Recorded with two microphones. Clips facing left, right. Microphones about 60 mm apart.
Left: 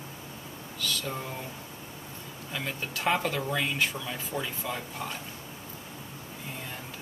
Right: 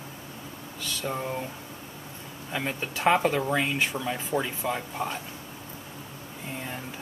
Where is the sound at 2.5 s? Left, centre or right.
Centre.